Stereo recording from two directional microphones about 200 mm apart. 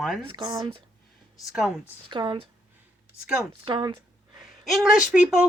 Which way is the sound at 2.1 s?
20° right (ahead or behind).